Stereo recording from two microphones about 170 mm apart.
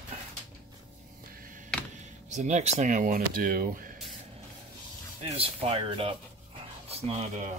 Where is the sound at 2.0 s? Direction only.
45° right (ahead or behind).